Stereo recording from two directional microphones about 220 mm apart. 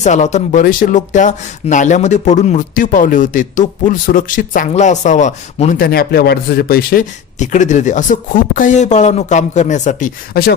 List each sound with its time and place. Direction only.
0.0 s speech: 30° left (ahead or behind)